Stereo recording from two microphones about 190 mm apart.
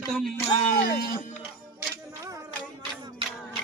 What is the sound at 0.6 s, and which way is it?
Speech, 40° left (ahead or behind).